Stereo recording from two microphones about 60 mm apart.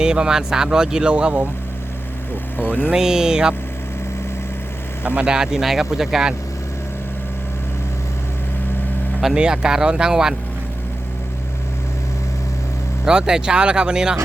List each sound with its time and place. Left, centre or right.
0.0 s speech: centre
2.6 s speech: left
2.9 s speech: centre
5.0 s speech: centre
9.2 s speech: centre
13.1 s speech: centre